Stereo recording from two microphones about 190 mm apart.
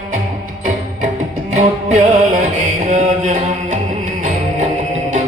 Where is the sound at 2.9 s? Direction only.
40° right (ahead or behind).